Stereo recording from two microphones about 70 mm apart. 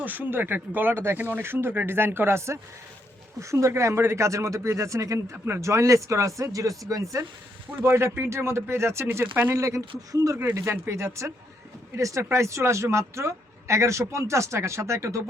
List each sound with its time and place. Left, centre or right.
0.0 s speech: right
7.9 s speech: right
9.6 s speech: right